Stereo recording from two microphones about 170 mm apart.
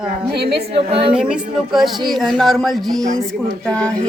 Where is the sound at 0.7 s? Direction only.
35° right (ahead or behind).